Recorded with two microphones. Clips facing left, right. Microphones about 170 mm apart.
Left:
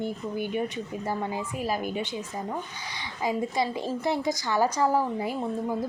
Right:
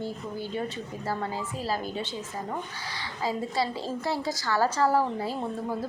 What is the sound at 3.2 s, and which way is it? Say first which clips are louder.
A woman's voice: left 2 dB; 20° left (ahead or behind).